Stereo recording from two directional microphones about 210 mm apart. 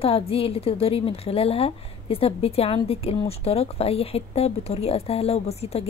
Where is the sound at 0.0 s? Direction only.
25° left (ahead or behind).